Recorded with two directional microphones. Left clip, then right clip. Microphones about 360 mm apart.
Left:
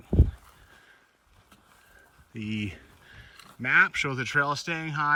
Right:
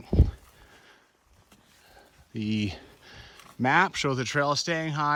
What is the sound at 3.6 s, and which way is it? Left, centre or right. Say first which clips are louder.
Speech: left 1 dB; centre.